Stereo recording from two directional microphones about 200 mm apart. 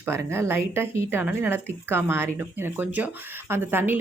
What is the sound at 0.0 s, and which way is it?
Speech, 10° right (ahead or behind).